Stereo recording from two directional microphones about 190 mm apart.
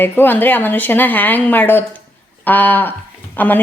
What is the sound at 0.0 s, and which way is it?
A woman's voice, 10° left (ahead or behind).